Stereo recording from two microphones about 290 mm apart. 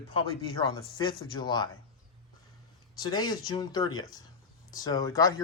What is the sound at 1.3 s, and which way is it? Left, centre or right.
Speech, centre.